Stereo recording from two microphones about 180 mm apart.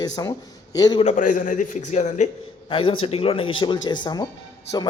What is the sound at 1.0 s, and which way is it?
Speech, 45° left (ahead or behind).